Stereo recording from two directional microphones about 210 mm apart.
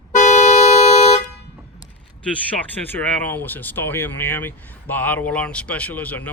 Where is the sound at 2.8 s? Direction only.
10° left (ahead or behind).